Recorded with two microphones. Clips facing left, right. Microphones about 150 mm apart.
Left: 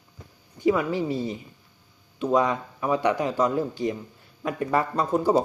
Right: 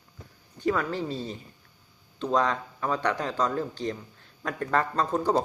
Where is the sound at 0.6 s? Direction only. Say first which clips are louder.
Left 5 dB; 10° left (ahead or behind).